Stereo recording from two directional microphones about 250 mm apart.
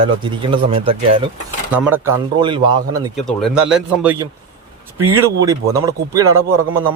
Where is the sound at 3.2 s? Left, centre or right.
Centre.